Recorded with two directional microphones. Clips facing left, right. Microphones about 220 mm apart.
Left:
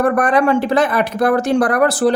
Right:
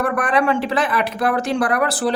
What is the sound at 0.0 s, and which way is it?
Speech, 45° left (ahead or behind).